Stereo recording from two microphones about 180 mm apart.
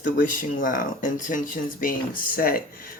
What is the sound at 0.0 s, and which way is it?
Speech, 50° left (ahead or behind).